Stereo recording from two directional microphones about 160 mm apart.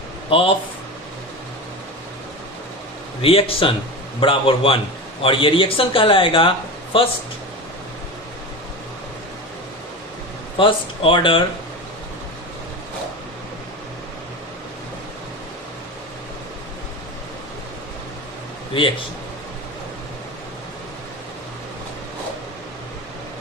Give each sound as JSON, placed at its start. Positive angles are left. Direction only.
{"t": 0.3, "sound": "speech", "side_deg": 35}
{"t": 3.2, "sound": "speech", "side_deg": 35}
{"t": 10.6, "sound": "speech", "side_deg": 30}
{"t": 18.7, "sound": "speech", "side_deg": 30}